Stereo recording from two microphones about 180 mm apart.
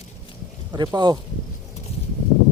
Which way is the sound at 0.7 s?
25° right (ahead or behind).